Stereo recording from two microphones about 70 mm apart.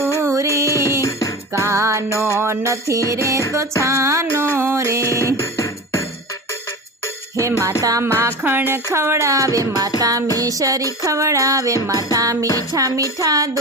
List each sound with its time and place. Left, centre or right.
0.0 s music: right
2.1 s speech: right
3.1 s music: right
5.4 s music: left
7.8 s music: right
8.4 s a woman's voice: right
11.0 s music: right
12.1 s a woman's voice: right